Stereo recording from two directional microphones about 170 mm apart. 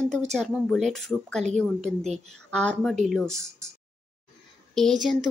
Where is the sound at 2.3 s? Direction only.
5° left (ahead or behind).